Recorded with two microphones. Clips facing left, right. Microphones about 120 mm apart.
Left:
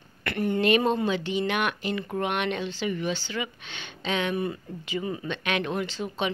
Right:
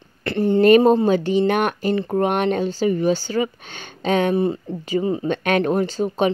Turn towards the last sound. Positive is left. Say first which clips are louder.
# right 10 dB
turn(degrees=-40)  # may be behind; listen again after turning